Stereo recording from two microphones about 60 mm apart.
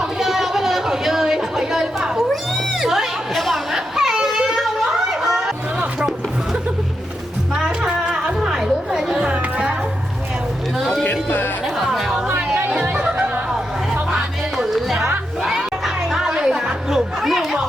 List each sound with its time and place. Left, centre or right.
0.0 s chatter: centre
3.8 s a sound: centre
6.0 s music: centre
8.4 s music: centre
10.8 s music: centre
11.0 s music: left
11.6 s music: centre
12.8 s music: right
13.5 s music: centre
15.4 s crowd: centre
16.9 s music: centre